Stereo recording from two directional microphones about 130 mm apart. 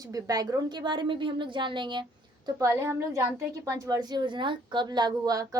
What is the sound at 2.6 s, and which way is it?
A woman's voice, 20° right (ahead or behind).